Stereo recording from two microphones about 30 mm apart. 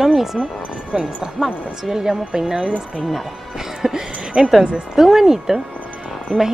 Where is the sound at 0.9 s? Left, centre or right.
Right.